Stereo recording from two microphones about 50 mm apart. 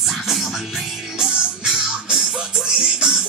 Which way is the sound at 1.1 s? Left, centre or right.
Centre.